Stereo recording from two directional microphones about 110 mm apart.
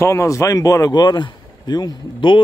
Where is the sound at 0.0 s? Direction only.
25° left (ahead or behind).